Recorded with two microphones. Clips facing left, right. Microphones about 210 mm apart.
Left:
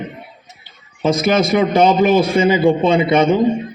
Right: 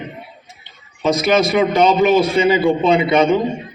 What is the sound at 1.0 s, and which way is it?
A man's voice, 50° left (ahead or behind).